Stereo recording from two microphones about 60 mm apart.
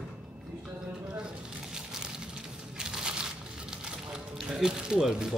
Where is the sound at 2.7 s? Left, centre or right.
Centre.